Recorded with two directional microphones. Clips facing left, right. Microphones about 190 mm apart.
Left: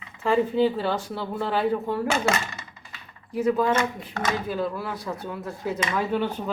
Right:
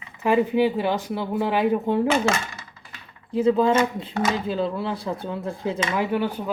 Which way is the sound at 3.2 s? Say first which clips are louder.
Right 3 dB; 30° right (ahead or behind).